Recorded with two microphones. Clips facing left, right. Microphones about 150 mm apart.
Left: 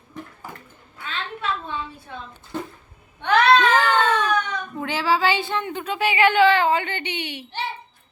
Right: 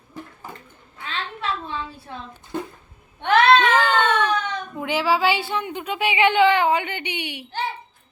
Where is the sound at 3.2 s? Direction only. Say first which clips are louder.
Right 1 dB; 25° right (ahead or behind).